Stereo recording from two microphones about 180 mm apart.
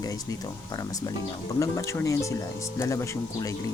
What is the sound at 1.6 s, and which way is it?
Speech, 15° left (ahead or behind).